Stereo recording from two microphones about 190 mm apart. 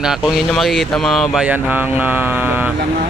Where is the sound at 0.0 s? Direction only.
5° right (ahead or behind).